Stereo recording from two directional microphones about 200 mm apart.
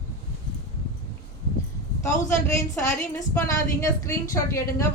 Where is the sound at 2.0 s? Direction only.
15° left (ahead or behind).